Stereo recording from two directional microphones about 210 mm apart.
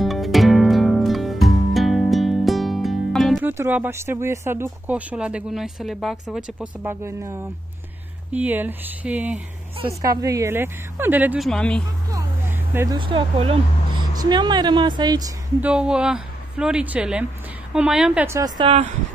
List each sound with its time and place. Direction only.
0.0 s music: centre (ahead or behind)
3.4 s speech: 10° right (ahead or behind)
12.1 s vehicle: 15° right (ahead or behind)
12.9 s speech: 25° right (ahead or behind)
15.6 s a woman's voice: 5° right (ahead or behind)
18.6 s speech: 25° right (ahead or behind)